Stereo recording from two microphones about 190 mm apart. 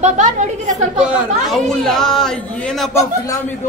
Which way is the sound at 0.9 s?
5° right (ahead or behind).